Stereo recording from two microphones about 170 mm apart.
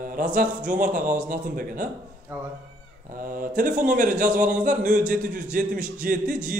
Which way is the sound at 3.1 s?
55° right (ahead or behind).